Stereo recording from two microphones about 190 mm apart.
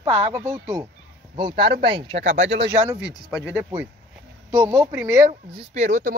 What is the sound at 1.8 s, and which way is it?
Speech, 30° right (ahead or behind).